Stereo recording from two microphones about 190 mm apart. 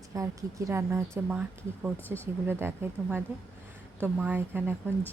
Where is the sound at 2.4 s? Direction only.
10° right (ahead or behind).